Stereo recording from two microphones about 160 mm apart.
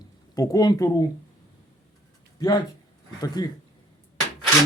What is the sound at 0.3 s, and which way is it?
Speech, 20° left (ahead or behind).